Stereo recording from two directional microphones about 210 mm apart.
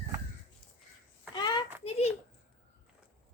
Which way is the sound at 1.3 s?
20° left (ahead or behind).